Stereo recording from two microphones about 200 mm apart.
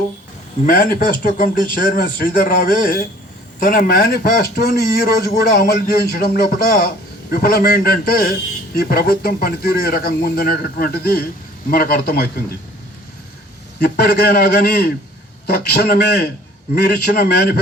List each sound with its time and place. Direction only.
0.6 s a man's voice: 45° left (ahead or behind)
13.8 s a man's voice: 55° left (ahead or behind)